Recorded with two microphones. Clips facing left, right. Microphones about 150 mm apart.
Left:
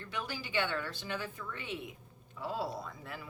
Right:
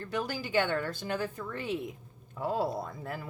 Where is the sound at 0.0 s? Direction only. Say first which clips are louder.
Right 7 dB; 40° right (ahead or behind).